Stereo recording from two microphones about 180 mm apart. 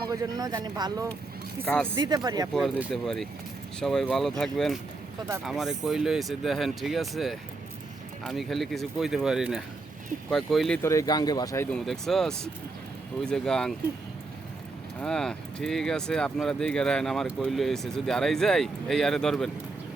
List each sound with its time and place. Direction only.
0.1 s speech: 20° right (ahead or behind)
1.6 s speech: 5° left (ahead or behind)
2.0 s speech: 20° right (ahead or behind)
2.5 s speech: centre (ahead or behind)
10.8 s speech: 20° left (ahead or behind)
11.9 s speech: centre (ahead or behind)
15.0 s speech: 5° left (ahead or behind)